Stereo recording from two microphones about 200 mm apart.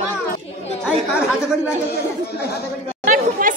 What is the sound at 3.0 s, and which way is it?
Chatter, 40° right (ahead or behind).